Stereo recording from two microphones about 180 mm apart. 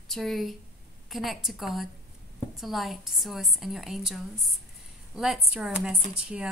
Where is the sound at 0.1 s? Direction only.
Centre (ahead or behind).